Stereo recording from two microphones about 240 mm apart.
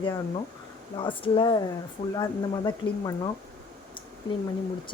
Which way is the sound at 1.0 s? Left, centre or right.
Left.